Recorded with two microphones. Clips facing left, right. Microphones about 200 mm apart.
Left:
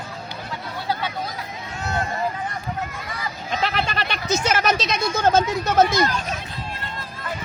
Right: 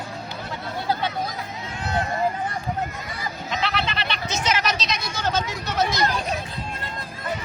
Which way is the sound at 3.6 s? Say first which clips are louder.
Left 3 dB; 45° left (ahead or behind).